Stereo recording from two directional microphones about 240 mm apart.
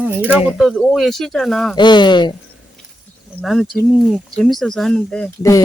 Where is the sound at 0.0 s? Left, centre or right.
Centre.